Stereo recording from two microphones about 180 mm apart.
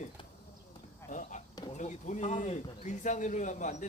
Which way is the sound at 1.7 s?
40° left (ahead or behind).